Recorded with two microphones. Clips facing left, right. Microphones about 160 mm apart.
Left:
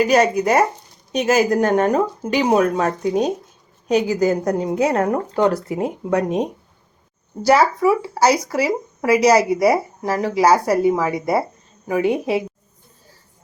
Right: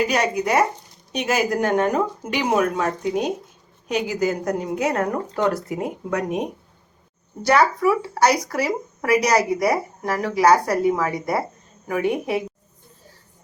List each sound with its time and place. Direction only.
0.1 s a woman's voice: 45° left (ahead or behind); by 12.4 s 25° left (ahead or behind)